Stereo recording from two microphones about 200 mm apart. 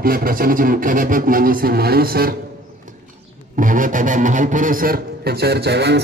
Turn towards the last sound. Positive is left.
turn(degrees=-55)  # may be behind; listen again after turning